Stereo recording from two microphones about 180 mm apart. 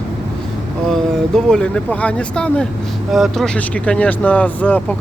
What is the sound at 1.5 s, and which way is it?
Speech, 5° left (ahead or behind).